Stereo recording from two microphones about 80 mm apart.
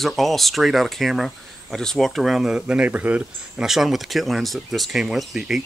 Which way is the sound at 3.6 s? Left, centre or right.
Centre.